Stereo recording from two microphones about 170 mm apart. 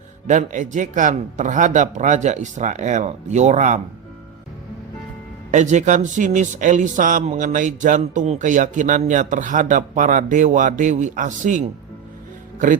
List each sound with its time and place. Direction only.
0.3 s speech: 45° right (ahead or behind)
5.5 s speech: 45° right (ahead or behind)
12.5 s music: 50° right (ahead or behind)